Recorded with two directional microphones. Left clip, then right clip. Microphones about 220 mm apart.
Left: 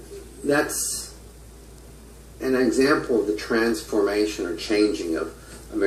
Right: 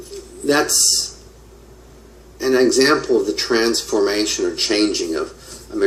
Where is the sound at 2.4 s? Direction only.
30° right (ahead or behind).